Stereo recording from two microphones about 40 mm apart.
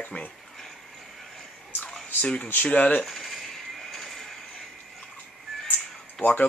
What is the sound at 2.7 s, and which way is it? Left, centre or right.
Speech, left.